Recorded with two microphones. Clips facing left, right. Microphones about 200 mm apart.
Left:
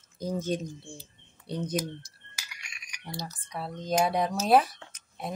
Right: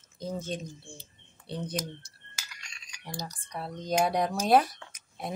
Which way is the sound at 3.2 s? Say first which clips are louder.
Left 1 dB; centre (ahead or behind).